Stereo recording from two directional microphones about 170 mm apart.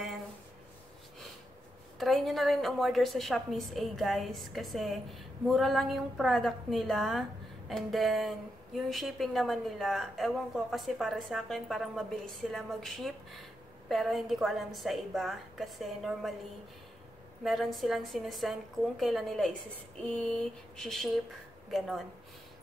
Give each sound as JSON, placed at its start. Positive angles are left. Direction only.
{"t": 2.0, "sound": "a woman's voice", "side_deg": 0}
{"t": 17.4, "sound": "a woman's voice", "side_deg": 0}